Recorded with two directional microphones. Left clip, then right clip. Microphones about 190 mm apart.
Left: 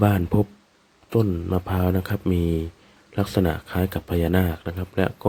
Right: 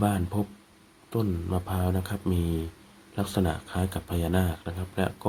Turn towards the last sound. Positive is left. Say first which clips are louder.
# left 6 dB
turn(degrees=30)  # may be behind; listen again after turning